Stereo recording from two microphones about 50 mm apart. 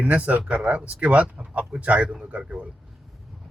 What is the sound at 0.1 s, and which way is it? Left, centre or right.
Speech, right.